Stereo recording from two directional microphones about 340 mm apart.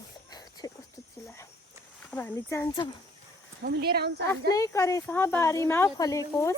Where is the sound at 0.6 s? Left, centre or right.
Centre.